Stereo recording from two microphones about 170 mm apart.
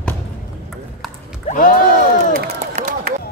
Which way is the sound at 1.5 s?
55° left (ahead or behind).